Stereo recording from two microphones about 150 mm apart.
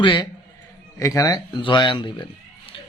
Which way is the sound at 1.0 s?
20° left (ahead or behind).